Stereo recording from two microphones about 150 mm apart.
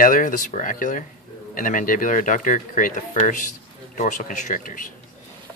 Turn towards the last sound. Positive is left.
turn(degrees=60)  # may be behind; listen again after turning